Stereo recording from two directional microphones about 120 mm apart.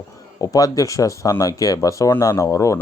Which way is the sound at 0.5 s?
30° left (ahead or behind).